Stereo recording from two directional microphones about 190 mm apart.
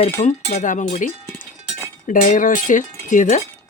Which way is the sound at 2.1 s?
45° left (ahead or behind).